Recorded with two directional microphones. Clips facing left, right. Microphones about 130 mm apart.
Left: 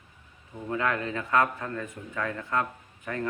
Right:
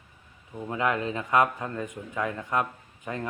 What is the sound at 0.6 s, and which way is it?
A man's voice, 20° right (ahead or behind).